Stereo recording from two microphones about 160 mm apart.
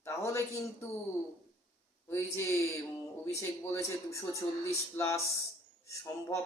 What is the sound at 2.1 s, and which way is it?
Speech, 15° left (ahead or behind).